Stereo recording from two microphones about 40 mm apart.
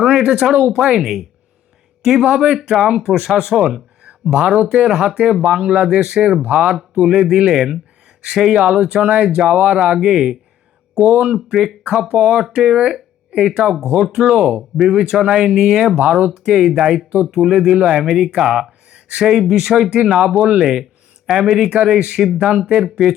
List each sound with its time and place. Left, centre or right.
0.2 s speech: centre
4.5 s speech: right
4.9 s speech: right
6.4 s speech: right
7.0 s speech: centre
12.4 s speech: centre
12.6 s speech: right
18.9 s a sound: right
19.2 s speech: centre
21.2 s speech: centre
21.7 s speech: right
22.2 s speech: centre
22.4 s speech: right